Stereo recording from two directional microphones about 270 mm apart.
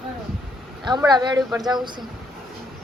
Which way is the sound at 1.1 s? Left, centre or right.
Centre.